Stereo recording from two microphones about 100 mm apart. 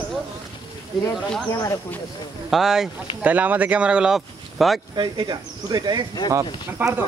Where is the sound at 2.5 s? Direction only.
5° right (ahead or behind).